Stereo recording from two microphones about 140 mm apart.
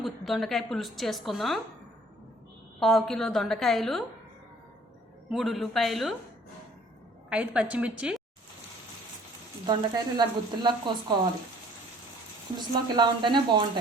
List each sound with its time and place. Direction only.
0.0 s a woman's voice: centre (ahead or behind)
2.8 s a woman's voice: 5° left (ahead or behind)
5.3 s a woman's voice: centre (ahead or behind)
7.3 s a woman's voice: 5° right (ahead or behind)
9.6 s speech: 30° right (ahead or behind)
12.5 s speech: 30° right (ahead or behind)